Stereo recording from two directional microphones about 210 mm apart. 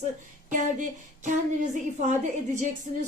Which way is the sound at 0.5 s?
35° right (ahead or behind).